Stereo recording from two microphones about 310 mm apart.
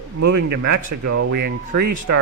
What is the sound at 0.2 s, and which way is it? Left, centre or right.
Speech, right.